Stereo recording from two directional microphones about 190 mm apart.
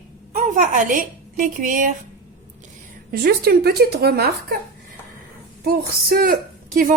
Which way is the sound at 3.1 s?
55° right (ahead or behind).